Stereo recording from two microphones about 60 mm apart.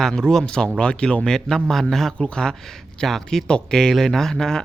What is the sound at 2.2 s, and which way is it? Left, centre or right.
Speech, centre.